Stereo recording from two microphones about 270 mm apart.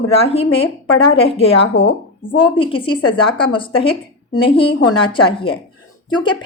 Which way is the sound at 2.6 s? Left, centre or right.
Centre.